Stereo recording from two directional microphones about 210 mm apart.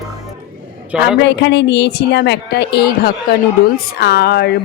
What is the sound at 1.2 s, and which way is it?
Speech, 55° left (ahead or behind).